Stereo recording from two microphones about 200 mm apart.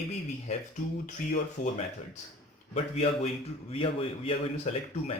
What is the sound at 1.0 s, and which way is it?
Speech, 35° left (ahead or behind).